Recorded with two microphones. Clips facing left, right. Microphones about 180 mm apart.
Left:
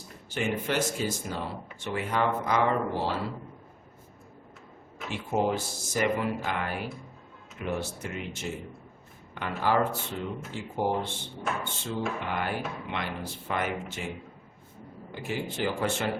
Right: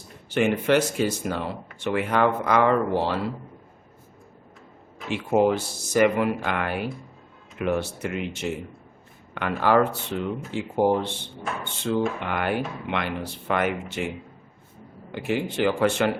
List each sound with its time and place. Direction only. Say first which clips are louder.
0.3 s speech: right 9 dB; 70° right (ahead or behind)
5.0 s speech: right 7 dB; 70° right (ahead or behind)
15.1 s speech: right 7 dB; 70° right (ahead or behind)